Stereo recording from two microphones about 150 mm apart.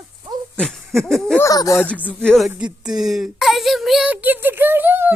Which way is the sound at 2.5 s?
5° right (ahead or behind).